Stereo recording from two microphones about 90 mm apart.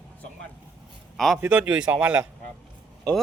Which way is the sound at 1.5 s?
15° right (ahead or behind).